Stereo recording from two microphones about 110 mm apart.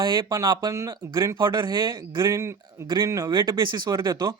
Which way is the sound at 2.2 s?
25° right (ahead or behind).